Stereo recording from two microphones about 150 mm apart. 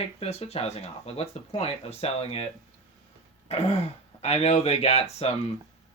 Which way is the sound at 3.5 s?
45° left (ahead or behind).